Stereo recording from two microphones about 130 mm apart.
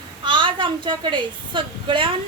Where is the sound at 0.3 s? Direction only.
40° right (ahead or behind).